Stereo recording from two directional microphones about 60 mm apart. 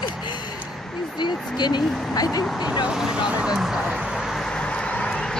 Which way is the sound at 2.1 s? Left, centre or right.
Left.